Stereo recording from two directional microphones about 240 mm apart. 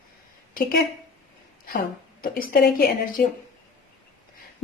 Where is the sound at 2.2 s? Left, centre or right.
Left.